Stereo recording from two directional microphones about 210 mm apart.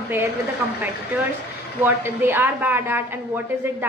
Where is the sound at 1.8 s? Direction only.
10° right (ahead or behind).